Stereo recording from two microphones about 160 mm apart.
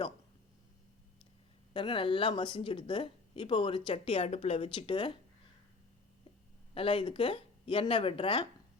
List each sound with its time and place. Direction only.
1.7 s speech: 30° left (ahead or behind)
6.7 s speech: 35° left (ahead or behind)